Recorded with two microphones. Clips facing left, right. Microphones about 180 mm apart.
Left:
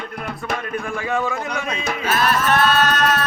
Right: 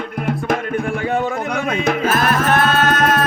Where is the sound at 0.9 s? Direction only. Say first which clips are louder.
Even; 30° right (ahead or behind).